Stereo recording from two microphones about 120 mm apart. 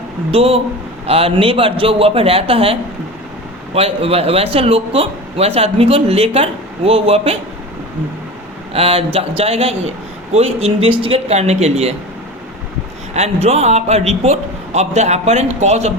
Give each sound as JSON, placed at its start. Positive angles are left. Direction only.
{"t": 0.3, "sound": "a man's voice", "side_deg": -55}
{"t": 3.8, "sound": "speech", "side_deg": -55}
{"t": 8.7, "sound": "speech", "side_deg": -55}
{"t": 13.1, "sound": "speech", "side_deg": -60}